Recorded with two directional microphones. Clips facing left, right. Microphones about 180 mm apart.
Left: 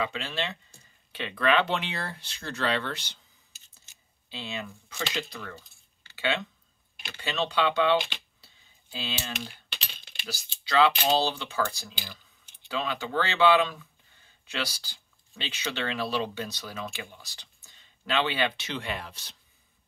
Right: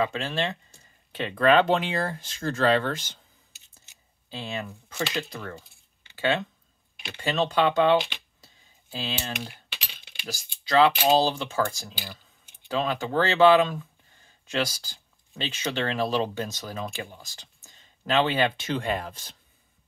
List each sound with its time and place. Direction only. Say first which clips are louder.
0.0 s speech: right 5 dB; 45° right (ahead or behind)
4.3 s speech: right 3 dB; 45° right (ahead or behind)